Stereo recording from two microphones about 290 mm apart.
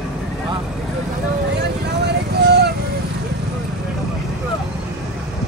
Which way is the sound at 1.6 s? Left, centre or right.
Right.